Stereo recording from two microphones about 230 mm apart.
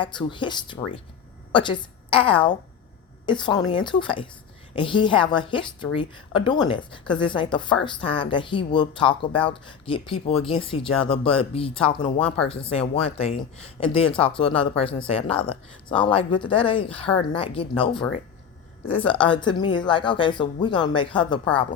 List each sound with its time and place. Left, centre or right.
0.0 s a woman's voice: left
18.9 s speech: left